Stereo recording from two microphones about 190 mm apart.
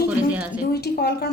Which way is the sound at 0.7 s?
60° left (ahead or behind).